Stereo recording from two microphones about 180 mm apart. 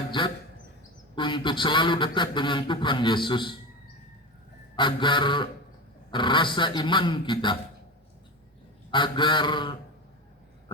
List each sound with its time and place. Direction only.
1.1 s a man's voice: 25° left (ahead or behind)
4.8 s a man's voice: 25° left (ahead or behind)
8.9 s a man's voice: 25° left (ahead or behind)